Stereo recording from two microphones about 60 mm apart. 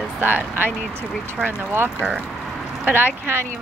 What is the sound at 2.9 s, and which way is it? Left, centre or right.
Speech, right.